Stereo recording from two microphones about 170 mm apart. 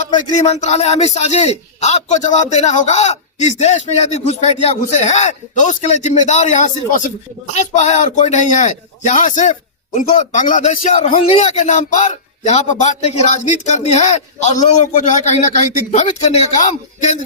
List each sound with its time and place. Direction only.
0.3 s a man's voice: 40° left (ahead or behind)